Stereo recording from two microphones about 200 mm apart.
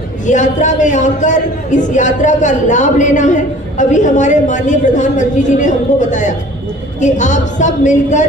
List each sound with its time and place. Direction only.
0.3 s a man's voice: 40° left (ahead or behind)